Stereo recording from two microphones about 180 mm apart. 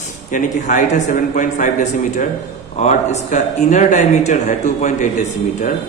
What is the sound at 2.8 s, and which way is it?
Speech, 40° left (ahead or behind).